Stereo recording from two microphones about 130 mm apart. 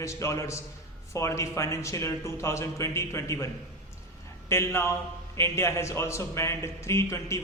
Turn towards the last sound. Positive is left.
turn(degrees=20)  # may be behind; listen again after turning